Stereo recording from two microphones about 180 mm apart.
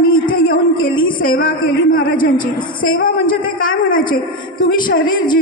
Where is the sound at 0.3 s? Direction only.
50° left (ahead or behind).